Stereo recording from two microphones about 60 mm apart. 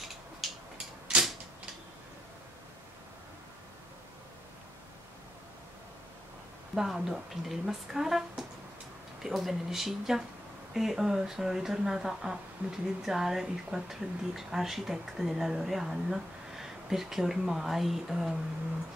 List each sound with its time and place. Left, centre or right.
0.4 s a sound: centre
6.7 s speech: centre
12.6 s speech: right
13.0 s speech: centre